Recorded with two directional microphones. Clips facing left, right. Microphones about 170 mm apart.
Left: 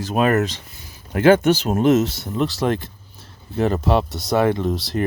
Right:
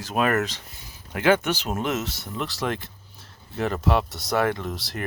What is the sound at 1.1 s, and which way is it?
Speech, 40° left (ahead or behind).